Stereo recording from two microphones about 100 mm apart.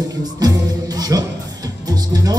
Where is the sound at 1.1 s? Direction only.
35° right (ahead or behind).